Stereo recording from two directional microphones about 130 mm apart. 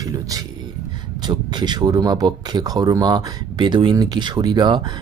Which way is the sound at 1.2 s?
35° right (ahead or behind).